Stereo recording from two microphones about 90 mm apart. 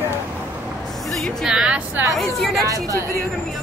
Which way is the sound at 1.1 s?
5° left (ahead or behind).